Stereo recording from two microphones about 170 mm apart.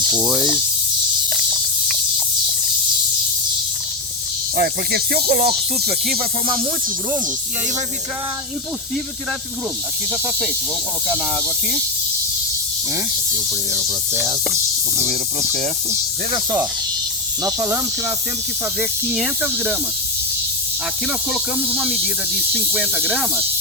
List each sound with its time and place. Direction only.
4.5 s rapping: 65° right (ahead or behind)
16.3 s speech: 20° right (ahead or behind)
18.8 s speech: 5° right (ahead or behind)
21.3 s speech: centre (ahead or behind)